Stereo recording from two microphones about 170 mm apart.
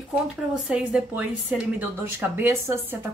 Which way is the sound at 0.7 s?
5° right (ahead or behind).